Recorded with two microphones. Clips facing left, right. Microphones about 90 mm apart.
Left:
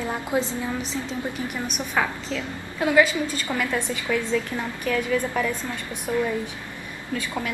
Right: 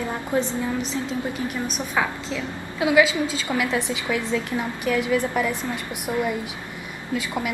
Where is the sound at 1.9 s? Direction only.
5° right (ahead or behind).